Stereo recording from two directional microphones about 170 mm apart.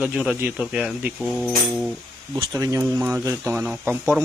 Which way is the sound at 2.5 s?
20° right (ahead or behind).